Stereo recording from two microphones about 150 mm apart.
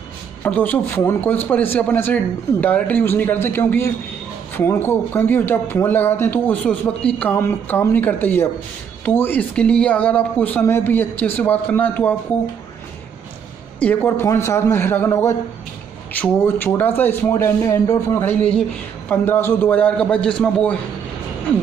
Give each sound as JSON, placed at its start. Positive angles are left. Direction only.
{"t": 0.4, "sound": "speech", "side_deg": 10}
{"t": 13.7, "sound": "speech", "side_deg": 10}